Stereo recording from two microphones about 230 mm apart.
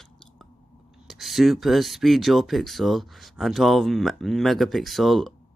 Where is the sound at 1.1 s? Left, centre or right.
Centre.